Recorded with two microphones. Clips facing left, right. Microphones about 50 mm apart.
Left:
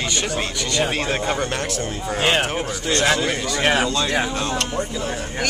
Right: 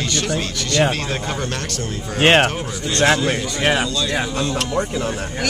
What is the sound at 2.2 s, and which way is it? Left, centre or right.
Speech, right.